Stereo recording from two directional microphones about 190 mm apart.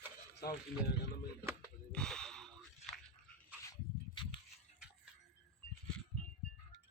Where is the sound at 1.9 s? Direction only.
5° left (ahead or behind).